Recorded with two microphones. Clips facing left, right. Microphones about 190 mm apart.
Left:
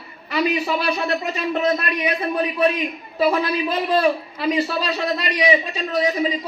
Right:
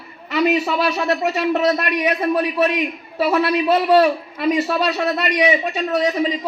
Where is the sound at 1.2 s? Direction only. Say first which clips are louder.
Right 5 dB; 75° right (ahead or behind).